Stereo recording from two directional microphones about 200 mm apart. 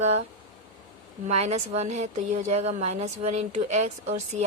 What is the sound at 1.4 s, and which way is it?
A woman's voice, 35° right (ahead or behind).